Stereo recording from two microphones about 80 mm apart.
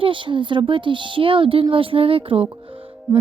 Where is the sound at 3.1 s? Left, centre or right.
Right.